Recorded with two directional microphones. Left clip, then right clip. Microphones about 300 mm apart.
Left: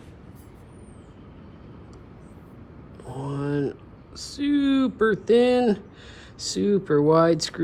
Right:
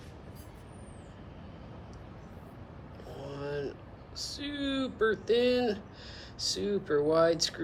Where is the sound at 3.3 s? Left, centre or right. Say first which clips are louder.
Left 9 dB; centre.